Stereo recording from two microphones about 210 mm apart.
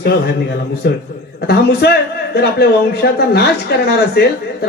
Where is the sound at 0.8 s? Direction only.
50° left (ahead or behind).